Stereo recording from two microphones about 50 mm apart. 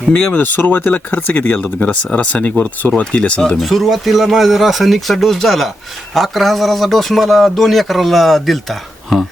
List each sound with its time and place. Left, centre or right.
0.1 s speech: centre
0.3 s speech: left
0.9 s speech: left
3.6 s a man's voice: centre